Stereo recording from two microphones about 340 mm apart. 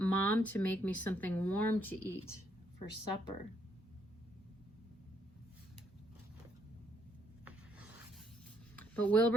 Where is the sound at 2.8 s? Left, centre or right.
Left.